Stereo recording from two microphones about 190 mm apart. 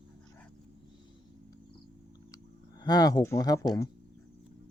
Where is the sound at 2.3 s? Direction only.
20° left (ahead or behind).